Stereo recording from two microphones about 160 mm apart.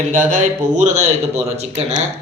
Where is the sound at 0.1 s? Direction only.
55° right (ahead or behind).